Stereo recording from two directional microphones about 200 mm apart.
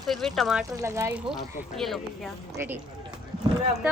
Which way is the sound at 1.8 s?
Centre (ahead or behind).